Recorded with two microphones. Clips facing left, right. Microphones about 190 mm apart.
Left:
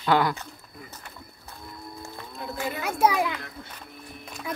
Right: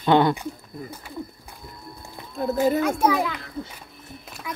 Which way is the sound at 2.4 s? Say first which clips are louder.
Right 12 dB; 40° right (ahead or behind).